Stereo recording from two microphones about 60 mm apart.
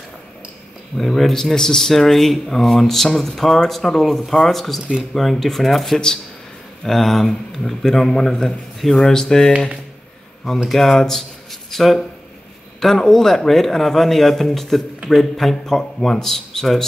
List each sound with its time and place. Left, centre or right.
0.9 s speech: centre
10.7 s speech: centre